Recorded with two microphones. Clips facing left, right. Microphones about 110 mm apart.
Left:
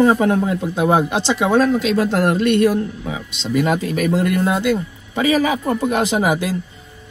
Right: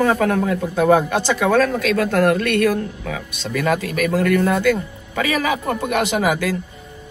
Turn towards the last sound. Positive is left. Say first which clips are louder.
# left 1 dB
turn(degrees=25)  # may be behind; listen again after turning